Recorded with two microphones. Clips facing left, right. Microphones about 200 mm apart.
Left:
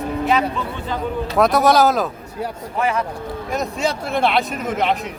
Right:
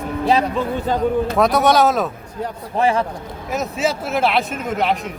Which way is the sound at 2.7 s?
30° right (ahead or behind).